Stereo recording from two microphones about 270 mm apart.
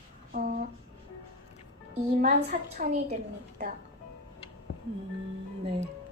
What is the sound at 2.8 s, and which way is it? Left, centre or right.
Speech, right.